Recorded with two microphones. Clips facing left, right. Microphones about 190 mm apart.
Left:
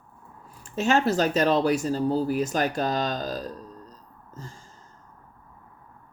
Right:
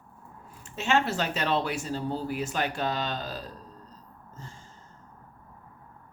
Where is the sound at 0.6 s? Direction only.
40° left (ahead or behind).